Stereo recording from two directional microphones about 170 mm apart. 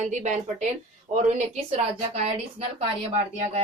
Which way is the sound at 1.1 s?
35° right (ahead or behind).